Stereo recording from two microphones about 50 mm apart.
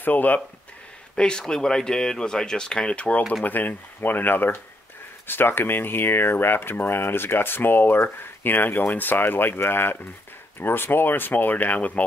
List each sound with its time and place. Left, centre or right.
0.0 s speech: left
1.1 s speech: centre
3.4 s speech: left